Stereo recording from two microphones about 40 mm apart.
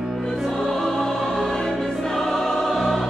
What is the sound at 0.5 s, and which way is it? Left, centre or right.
Music, centre.